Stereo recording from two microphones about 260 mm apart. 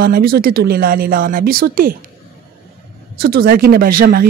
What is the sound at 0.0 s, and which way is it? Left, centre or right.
Speech, right.